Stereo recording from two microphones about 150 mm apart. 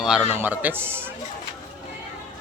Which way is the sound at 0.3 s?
10° right (ahead or behind).